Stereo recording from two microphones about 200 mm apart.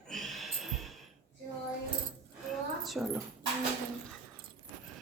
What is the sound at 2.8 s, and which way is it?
Speech, centre (ahead or behind).